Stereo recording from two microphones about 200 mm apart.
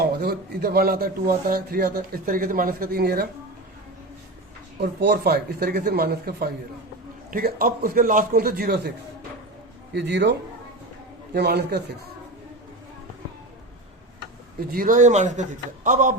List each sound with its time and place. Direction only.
0.0 s speech: 50° right (ahead or behind)
4.8 s speech: 55° right (ahead or behind)
9.9 s a man's voice: 60° right (ahead or behind)
11.3 s a man's voice: 55° right (ahead or behind)
14.7 s a man's voice: 45° right (ahead or behind)